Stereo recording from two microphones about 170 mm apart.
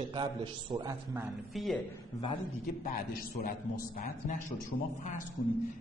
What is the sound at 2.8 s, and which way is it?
A man's voice, 60° left (ahead or behind).